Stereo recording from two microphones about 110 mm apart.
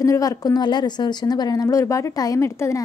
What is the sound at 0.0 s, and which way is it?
A woman's voice, 30° left (ahead or behind).